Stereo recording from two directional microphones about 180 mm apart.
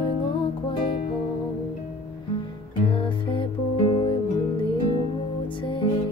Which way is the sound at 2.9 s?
30° left (ahead or behind).